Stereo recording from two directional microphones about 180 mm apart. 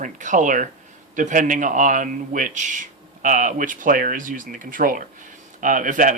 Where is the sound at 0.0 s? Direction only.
45° right (ahead or behind).